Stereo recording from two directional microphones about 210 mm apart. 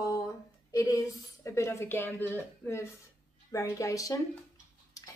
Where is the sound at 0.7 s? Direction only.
15° left (ahead or behind).